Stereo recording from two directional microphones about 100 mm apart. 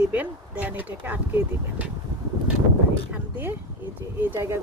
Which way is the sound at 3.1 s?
15° right (ahead or behind).